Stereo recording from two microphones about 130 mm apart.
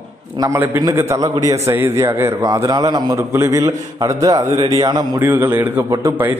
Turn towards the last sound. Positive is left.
turn(degrees=-20)  # may be behind; listen again after turning